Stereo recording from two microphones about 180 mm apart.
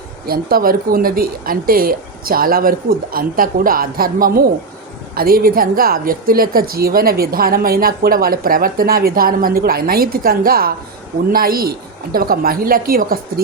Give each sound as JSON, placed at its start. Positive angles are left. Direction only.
{"t": 0.3, "sound": "a woman's voice", "side_deg": -55}